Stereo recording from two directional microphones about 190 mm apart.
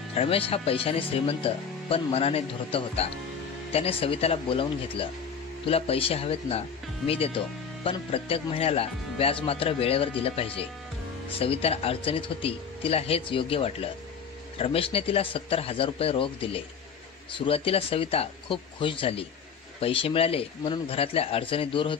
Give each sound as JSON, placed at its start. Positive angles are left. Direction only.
{"t": 0.1, "sound": "speech", "side_deg": 30}